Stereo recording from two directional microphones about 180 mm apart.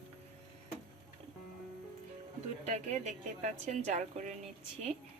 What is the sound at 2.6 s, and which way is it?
A woman's voice, 40° right (ahead or behind).